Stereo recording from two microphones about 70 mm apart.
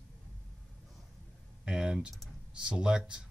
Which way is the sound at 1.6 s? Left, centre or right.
Centre.